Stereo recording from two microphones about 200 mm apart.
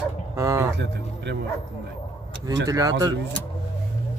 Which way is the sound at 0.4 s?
15° right (ahead or behind).